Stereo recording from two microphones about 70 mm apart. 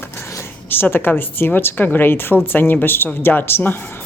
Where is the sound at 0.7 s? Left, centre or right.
Left.